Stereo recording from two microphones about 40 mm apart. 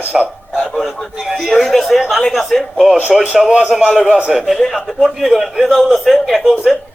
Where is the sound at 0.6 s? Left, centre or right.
Centre.